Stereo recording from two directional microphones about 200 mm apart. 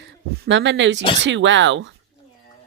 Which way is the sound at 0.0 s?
65° right (ahead or behind).